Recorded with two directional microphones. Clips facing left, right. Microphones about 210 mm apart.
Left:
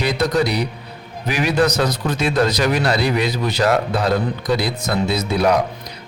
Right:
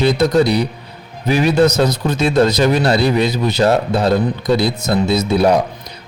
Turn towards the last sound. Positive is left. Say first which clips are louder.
# right 4 dB
turn(degrees=-25)  # may be behind; listen again after turning